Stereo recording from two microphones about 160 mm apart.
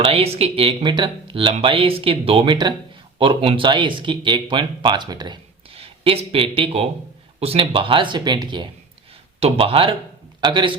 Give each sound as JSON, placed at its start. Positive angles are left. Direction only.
{"t": 0.0, "sound": "speech", "side_deg": -40}